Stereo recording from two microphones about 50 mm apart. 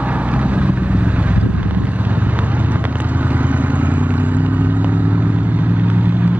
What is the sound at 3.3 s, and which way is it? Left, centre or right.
Vehicle, right.